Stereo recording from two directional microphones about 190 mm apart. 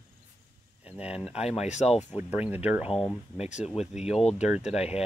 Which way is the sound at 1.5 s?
35° left (ahead or behind).